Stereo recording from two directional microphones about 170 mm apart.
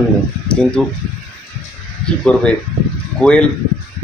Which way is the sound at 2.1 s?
5° left (ahead or behind).